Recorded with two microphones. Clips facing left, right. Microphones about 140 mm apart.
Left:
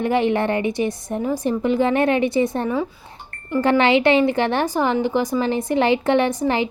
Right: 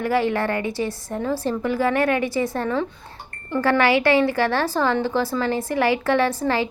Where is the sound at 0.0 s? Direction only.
20° left (ahead or behind).